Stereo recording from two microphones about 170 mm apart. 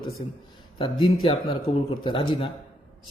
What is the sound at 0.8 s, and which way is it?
A man's voice, 25° left (ahead or behind).